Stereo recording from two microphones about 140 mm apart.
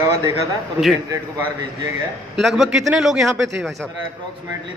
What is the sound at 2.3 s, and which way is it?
A man's voice, centre (ahead or behind).